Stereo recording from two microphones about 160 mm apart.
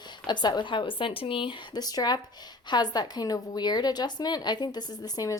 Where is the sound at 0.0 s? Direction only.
30° left (ahead or behind).